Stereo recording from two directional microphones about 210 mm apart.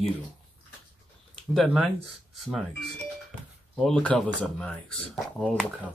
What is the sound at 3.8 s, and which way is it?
Speech, 5° left (ahead or behind).